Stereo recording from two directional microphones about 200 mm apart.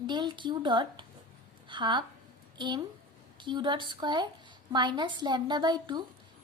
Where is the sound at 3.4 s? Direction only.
25° right (ahead or behind).